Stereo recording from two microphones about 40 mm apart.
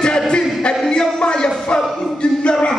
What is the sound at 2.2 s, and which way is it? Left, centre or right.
Music, left.